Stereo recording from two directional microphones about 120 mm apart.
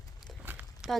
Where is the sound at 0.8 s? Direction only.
5° right (ahead or behind).